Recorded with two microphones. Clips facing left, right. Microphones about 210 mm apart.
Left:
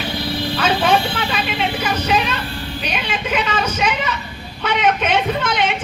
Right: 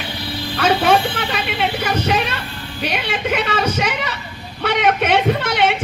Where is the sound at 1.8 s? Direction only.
60° right (ahead or behind).